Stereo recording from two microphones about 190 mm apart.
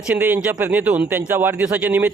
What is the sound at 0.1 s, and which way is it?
A man's voice, 10° right (ahead or behind).